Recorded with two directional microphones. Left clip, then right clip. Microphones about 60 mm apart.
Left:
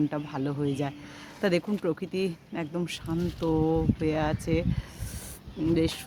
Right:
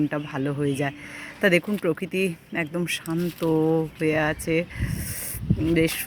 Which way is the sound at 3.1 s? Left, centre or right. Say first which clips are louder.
Right 3 dB; right.